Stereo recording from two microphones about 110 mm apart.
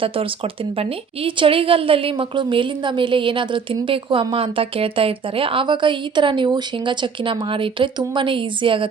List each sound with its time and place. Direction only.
0.0 s a woman's voice: 55° right (ahead or behind)